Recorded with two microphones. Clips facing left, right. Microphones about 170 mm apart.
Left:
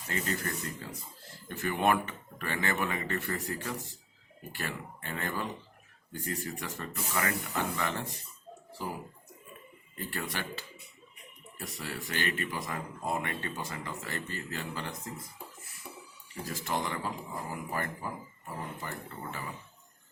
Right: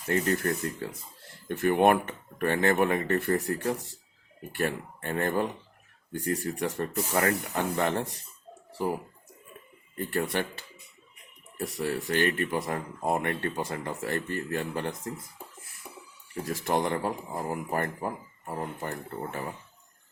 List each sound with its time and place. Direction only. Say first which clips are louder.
0.1 s speech: right 8 dB; 60° right (ahead or behind)
10.0 s speech: right 8 dB; 55° right (ahead or behind)
11.8 s speech: right 9 dB; 60° right (ahead or behind)
16.3 s speech: right 6 dB; 55° right (ahead or behind)